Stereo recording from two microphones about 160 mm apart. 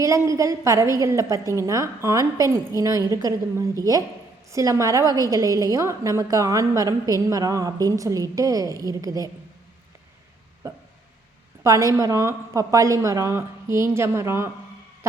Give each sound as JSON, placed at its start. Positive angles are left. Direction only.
{"t": 0.0, "sound": "a woman's voice", "side_deg": -20}
{"t": 11.6, "sound": "a woman's voice", "side_deg": -20}